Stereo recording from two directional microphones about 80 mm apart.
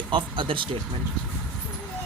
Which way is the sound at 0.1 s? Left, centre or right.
Right.